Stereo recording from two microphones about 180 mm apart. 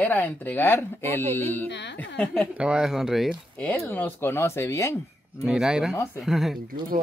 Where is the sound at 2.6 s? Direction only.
5° right (ahead or behind).